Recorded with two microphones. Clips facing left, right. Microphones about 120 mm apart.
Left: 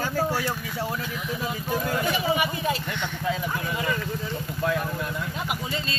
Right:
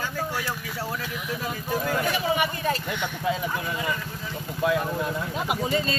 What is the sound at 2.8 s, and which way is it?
Speech, 10° right (ahead or behind).